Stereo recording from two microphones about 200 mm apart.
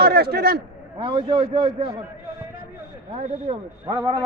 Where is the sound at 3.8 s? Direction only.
15° right (ahead or behind).